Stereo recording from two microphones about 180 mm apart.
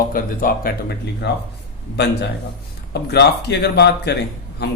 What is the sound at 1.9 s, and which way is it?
Speech, 70° left (ahead or behind).